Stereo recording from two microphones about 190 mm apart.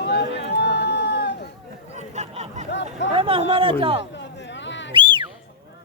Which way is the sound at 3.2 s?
30° right (ahead or behind).